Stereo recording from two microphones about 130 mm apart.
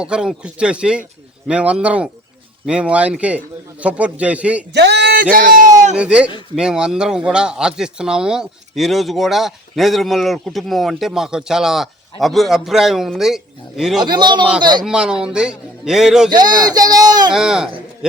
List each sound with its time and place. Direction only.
0.0 s a man's voice: 5° right (ahead or behind)
5.3 s speech: 90° right
6.0 s a man's voice: 10° right (ahead or behind)
14.0 s speech: 35° right (ahead or behind)
14.8 s speech: 5° right (ahead or behind)
16.3 s speech: 30° right (ahead or behind)
17.3 s speech: 5° right (ahead or behind)